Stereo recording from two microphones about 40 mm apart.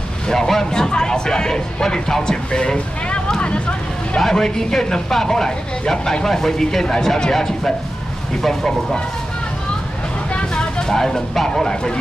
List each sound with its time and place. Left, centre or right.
0.3 s a sound: centre
4.2 s speech: centre
10.3 s speech: left